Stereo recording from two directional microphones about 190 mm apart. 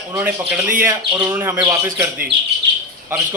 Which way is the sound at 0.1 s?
10° right (ahead or behind).